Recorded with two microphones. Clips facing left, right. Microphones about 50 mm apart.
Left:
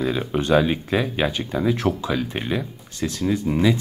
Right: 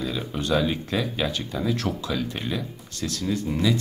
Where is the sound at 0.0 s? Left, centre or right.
Left.